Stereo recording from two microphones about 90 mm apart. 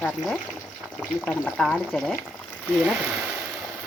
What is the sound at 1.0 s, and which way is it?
Speech, 10° left (ahead or behind).